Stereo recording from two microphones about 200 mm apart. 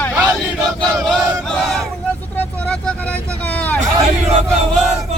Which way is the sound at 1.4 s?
Centre (ahead or behind).